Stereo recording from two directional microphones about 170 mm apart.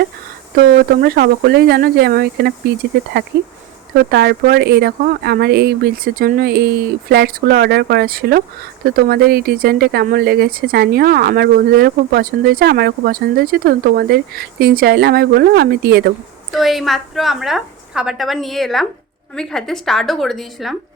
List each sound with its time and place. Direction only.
1.0 s speech: 65° right (ahead or behind)
16.5 s a woman's voice: centre (ahead or behind)